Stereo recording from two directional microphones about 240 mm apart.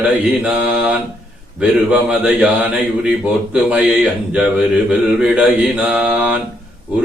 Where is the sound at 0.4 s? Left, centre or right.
Centre.